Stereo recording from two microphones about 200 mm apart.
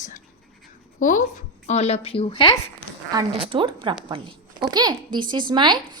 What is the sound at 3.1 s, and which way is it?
A woman's voice, 25° right (ahead or behind).